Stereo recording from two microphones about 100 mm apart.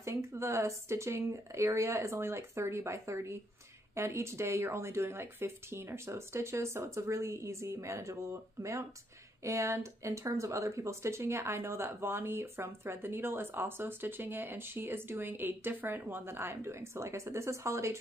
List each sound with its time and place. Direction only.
0.0 s speech: 30° right (ahead or behind)